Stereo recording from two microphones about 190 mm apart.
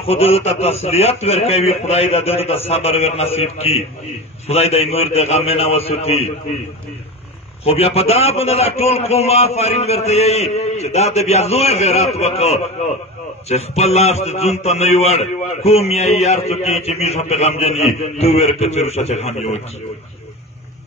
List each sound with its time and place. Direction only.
0.0 s a man's voice: 35° left (ahead or behind)
7.6 s a man's voice: 30° left (ahead or behind)